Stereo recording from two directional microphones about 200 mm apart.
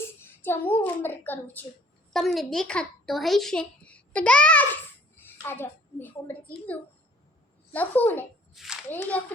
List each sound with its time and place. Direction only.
0.2 s a child's voice: 10° left (ahead or behind)
8.5 s hands: centre (ahead or behind)
8.9 s a child's voice: 10° left (ahead or behind)